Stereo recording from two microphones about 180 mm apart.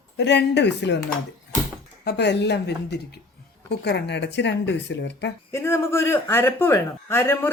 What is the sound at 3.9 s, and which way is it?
A woman's voice, 70° left (ahead or behind).